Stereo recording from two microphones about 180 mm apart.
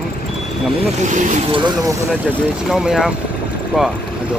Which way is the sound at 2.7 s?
5° right (ahead or behind).